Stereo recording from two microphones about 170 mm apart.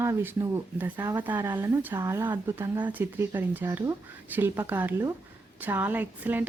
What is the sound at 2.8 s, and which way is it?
Speech, 10° right (ahead or behind).